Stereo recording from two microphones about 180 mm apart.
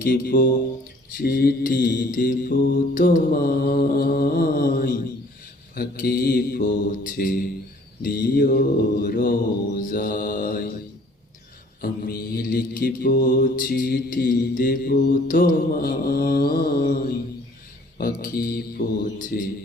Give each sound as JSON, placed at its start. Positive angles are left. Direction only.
{"t": 0.0, "sound": "mantra", "side_deg": 55}
{"t": 11.8, "sound": "mantra", "side_deg": 60}